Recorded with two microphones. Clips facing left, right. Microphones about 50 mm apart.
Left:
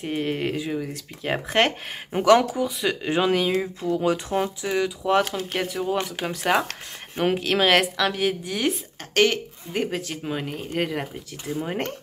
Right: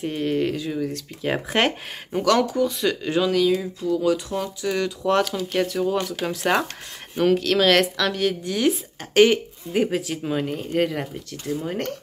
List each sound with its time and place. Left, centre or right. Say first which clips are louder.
0.0 s a woman's voice: right 3 dB; centre
0.7 s speech: right 3 dB; centre
2.1 s a woman's voice: left 2 dB; left
3.1 s speech: right 1 dB; left
4.6 s a woman's voice: right 4 dB; centre
6.2 s a woman's voice: even; centre
7.2 s a woman's voice: right 3 dB; centre
9.1 s speech: right 5 dB; centre
11.5 s speech: right 1 dB; left